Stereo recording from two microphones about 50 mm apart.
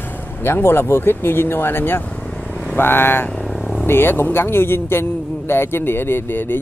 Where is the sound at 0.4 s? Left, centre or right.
Left.